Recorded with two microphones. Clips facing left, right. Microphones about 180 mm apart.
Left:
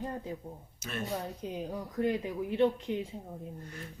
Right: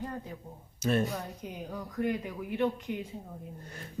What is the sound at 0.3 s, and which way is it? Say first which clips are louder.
Speech: left 4 dB; 30° left (ahead or behind).